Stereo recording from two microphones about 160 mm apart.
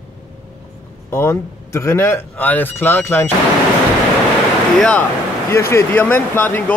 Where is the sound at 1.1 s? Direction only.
15° left (ahead or behind).